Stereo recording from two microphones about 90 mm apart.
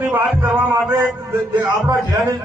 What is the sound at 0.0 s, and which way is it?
A man's voice, 20° right (ahead or behind).